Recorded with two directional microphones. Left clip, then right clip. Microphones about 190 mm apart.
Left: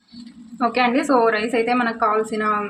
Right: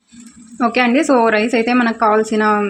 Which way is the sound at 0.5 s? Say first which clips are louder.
Right 4 dB; 35° right (ahead or behind).